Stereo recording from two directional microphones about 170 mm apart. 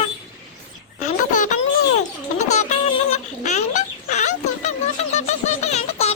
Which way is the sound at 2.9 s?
40° left (ahead or behind).